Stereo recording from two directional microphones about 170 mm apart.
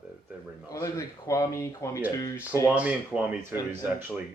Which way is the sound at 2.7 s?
10° right (ahead or behind).